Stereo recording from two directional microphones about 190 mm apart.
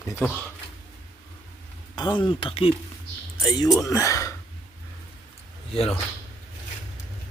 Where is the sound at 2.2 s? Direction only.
30° left (ahead or behind).